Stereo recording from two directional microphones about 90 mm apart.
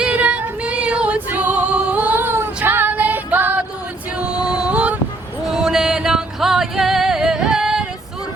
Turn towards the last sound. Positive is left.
turn(degrees=-5)  # may be behind; listen again after turning